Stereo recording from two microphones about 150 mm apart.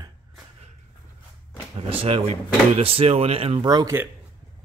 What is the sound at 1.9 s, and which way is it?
Speech, 40° right (ahead or behind).